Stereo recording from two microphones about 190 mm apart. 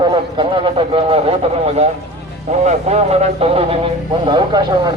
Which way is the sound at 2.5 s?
35° right (ahead or behind).